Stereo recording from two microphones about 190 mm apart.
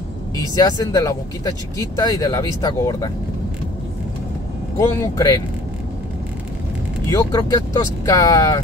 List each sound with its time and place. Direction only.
0.6 s speech: 20° left (ahead or behind)
4.7 s speech: 20° left (ahead or behind)
7.1 s speech: 20° left (ahead or behind)